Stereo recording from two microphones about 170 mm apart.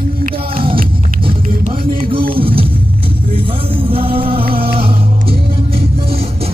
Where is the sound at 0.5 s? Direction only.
30° right (ahead or behind).